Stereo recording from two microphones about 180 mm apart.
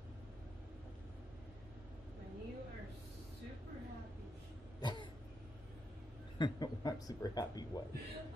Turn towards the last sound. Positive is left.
turn(degrees=20)  # may be behind; listen again after turning